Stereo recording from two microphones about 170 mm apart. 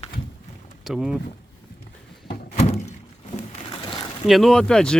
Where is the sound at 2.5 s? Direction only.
40° left (ahead or behind).